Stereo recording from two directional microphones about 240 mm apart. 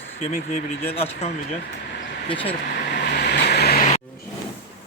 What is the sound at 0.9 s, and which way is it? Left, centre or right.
Speech, left.